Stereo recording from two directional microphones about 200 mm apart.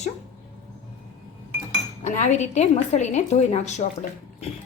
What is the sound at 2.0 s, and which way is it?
A woman's voice, 35° left (ahead or behind).